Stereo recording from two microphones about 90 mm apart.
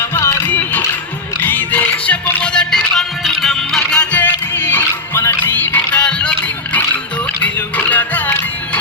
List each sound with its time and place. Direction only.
0.0 s music: 30° left (ahead or behind); by 6.3 s 10° left (ahead or behind)
7.4 s music: 20° left (ahead or behind)